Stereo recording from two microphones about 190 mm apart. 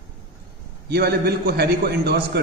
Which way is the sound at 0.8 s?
55° right (ahead or behind).